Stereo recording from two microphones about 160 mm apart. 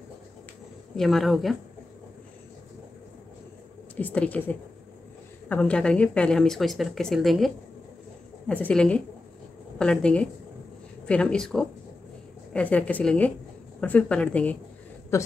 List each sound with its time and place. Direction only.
0.9 s speech: centre (ahead or behind)
3.9 s a woman's voice: 10° left (ahead or behind)